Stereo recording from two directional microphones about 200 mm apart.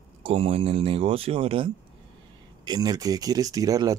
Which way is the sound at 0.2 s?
30° right (ahead or behind).